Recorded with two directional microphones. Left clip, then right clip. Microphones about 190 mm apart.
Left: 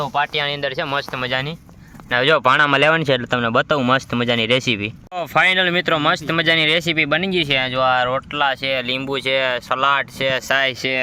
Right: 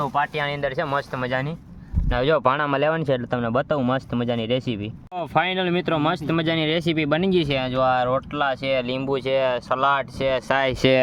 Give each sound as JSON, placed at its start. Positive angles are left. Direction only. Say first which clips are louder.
{"t": 0.0, "sound": "speech", "louder": "left 3 dB", "side_deg": 25}
{"t": 2.0, "sound": "speech", "louder": "left 5 dB", "side_deg": -5}
{"t": 7.6, "sound": "speech", "louder": "left 4 dB", "side_deg": 0}
{"t": 10.5, "sound": "speech", "louder": "left 4 dB", "side_deg": -20}